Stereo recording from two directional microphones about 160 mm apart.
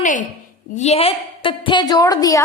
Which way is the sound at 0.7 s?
45° left (ahead or behind).